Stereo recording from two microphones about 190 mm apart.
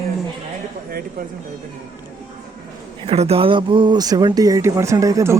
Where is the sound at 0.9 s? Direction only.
50° right (ahead or behind).